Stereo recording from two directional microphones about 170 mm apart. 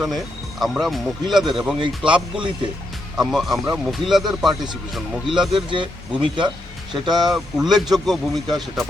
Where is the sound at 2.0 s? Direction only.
30° right (ahead or behind).